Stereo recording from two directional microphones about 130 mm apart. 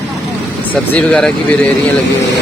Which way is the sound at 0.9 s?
5° left (ahead or behind).